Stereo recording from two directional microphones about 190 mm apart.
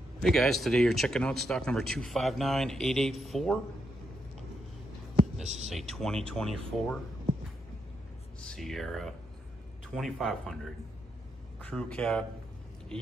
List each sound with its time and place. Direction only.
0.2 s speech: centre (ahead or behind)
5.1 s a sound: 35° right (ahead or behind)
5.7 s speech: centre (ahead or behind)
8.5 s speech: centre (ahead or behind)
11.6 s speech: 5° left (ahead or behind)